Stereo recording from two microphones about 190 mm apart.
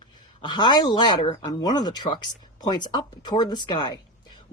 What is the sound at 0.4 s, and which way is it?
Speech, 25° left (ahead or behind).